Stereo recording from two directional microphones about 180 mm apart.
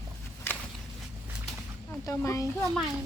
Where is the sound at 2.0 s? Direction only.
15° left (ahead or behind).